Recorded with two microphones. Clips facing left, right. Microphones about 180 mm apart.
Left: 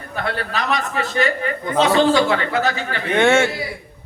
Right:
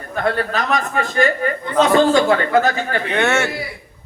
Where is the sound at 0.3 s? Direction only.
45° right (ahead or behind).